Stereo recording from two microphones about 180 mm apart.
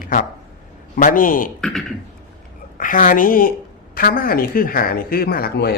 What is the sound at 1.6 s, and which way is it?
Speech, 5° left (ahead or behind).